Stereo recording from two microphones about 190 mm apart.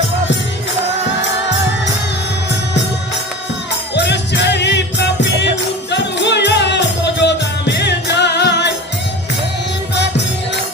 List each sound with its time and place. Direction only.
3.9 s music: 65° left (ahead or behind)